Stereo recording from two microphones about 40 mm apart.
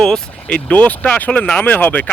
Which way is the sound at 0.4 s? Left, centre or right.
Left.